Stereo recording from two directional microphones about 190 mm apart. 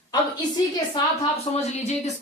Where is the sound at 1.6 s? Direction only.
35° left (ahead or behind).